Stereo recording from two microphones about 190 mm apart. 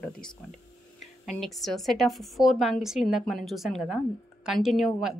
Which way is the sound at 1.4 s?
Centre (ahead or behind).